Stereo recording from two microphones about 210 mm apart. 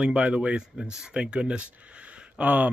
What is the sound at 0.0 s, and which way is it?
Speech, 5° right (ahead or behind).